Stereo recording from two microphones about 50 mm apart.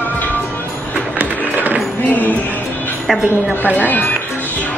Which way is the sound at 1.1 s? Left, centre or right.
Right.